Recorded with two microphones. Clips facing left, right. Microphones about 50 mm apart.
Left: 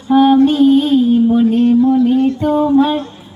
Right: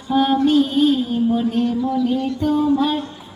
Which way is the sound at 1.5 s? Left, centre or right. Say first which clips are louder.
Left 9 dB; left.